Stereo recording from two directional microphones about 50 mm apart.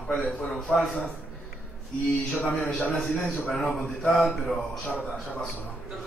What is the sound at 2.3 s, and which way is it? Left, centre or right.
Speech, left.